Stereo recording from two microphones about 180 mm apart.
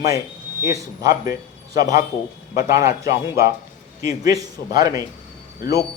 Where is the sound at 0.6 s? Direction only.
20° right (ahead or behind).